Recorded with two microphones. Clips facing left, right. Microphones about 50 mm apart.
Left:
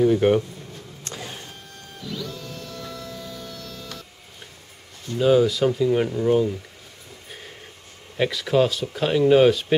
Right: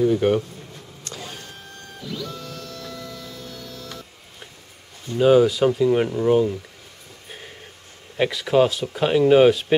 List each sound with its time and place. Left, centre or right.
0.0 s speech: centre
1.1 s printer: centre
2.0 s printer: centre
2.4 s music: centre
3.1 s music: centre
5.1 s speech: centre
8.2 s speech: centre